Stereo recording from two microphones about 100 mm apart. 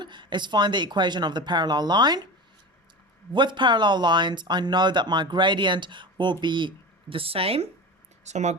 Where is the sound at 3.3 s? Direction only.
50° right (ahead or behind); by 7.6 s 75° right (ahead or behind).